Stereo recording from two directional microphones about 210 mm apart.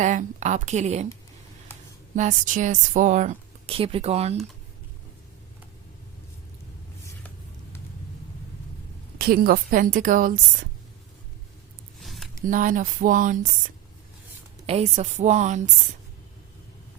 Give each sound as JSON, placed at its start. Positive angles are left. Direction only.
{"t": 0.0, "sound": "speech", "side_deg": -35}
{"t": 2.1, "sound": "speech", "side_deg": -35}
{"t": 9.1, "sound": "speech", "side_deg": -45}
{"t": 11.9, "sound": "a sound", "side_deg": 0}
{"t": 12.5, "sound": "speech", "side_deg": -40}
{"t": 14.7, "sound": "speech", "side_deg": -30}